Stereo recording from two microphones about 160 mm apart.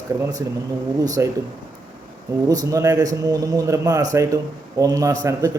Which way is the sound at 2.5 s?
20° right (ahead or behind).